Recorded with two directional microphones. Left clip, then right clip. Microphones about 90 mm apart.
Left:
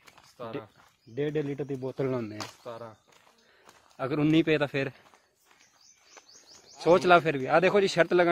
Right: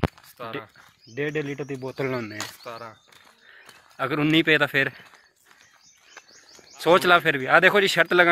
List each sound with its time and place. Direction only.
0.4 s speech: 25° left (ahead or behind)
1.1 s speech: 5° left (ahead or behind)
3.6 s speech: centre (ahead or behind)
6.8 s speech: 5° right (ahead or behind)